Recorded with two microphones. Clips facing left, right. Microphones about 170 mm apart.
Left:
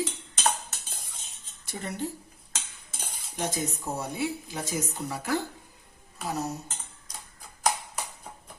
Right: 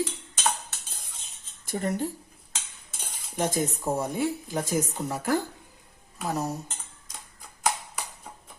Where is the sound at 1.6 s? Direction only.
50° right (ahead or behind).